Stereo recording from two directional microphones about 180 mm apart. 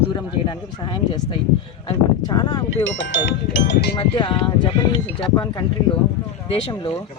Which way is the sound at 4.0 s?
30° left (ahead or behind).